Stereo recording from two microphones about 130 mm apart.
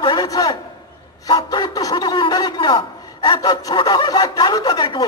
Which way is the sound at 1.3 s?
30° left (ahead or behind).